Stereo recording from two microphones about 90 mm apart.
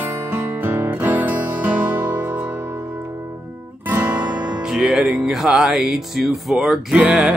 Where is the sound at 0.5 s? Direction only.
20° right (ahead or behind).